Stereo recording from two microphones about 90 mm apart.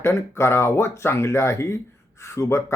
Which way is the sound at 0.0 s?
30° left (ahead or behind).